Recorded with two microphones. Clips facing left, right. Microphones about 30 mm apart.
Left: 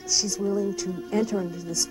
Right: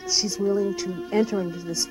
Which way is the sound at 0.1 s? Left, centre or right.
Right.